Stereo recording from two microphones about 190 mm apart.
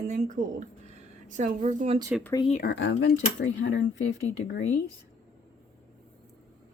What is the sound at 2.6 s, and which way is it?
Speech, 70° left (ahead or behind).